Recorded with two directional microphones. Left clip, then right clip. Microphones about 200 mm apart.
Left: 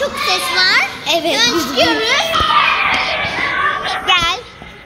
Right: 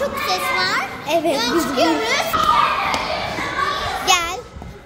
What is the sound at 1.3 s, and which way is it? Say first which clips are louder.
Speech: left 4 dB; 25° left (ahead or behind).